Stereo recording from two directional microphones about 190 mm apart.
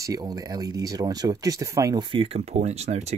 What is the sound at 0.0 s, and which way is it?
Speech, 20° right (ahead or behind).